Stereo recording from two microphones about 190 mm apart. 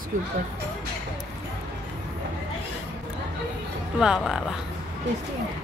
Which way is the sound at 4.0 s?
5° right (ahead or behind).